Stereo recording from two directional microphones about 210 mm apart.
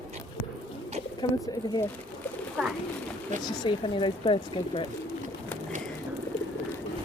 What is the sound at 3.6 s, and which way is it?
Speech, 25° left (ahead or behind).